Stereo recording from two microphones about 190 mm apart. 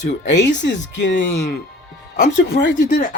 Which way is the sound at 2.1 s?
55° left (ahead or behind).